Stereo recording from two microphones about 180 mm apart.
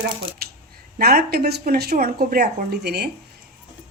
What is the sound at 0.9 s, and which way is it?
Dishes, 55° right (ahead or behind).